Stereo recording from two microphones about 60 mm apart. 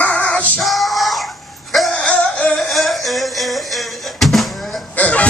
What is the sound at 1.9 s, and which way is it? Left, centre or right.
Music, centre.